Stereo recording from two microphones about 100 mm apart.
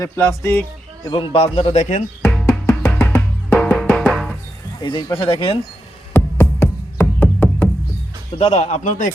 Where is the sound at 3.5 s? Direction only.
5° left (ahead or behind).